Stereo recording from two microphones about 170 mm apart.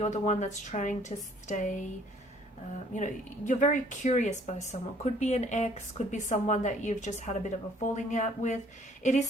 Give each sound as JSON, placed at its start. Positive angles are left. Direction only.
{"t": 0.0, "sound": "speech", "side_deg": 45}
{"t": 2.9, "sound": "speech", "side_deg": 45}